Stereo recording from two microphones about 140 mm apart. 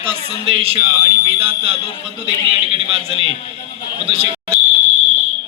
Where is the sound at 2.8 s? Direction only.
45° right (ahead or behind).